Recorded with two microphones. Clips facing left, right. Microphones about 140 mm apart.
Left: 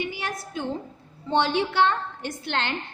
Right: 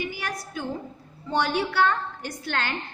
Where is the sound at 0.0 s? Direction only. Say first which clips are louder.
Left 1 dB; 25° left (ahead or behind).